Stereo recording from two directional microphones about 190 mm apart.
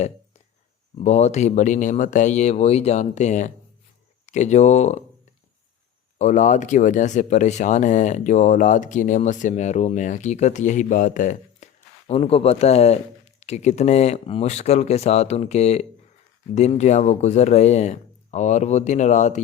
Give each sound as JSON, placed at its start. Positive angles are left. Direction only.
{"t": 0.9, "sound": "speech", "side_deg": 35}
{"t": 6.1, "sound": "speech", "side_deg": 40}